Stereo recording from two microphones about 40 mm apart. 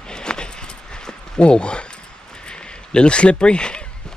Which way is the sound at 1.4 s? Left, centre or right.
Left.